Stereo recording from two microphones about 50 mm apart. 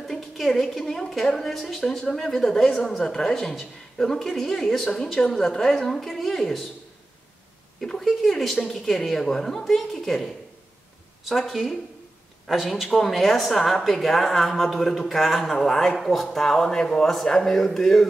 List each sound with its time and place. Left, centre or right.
0.1 s a woman's voice: centre
7.8 s a sound: centre
8.6 s a woman's voice: centre